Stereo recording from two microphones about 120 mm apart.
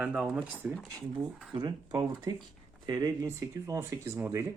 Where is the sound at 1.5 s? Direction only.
40° right (ahead or behind); by 4.4 s 20° right (ahead or behind).